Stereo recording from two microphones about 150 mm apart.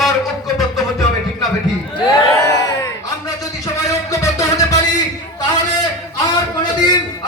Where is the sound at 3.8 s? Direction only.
20° left (ahead or behind).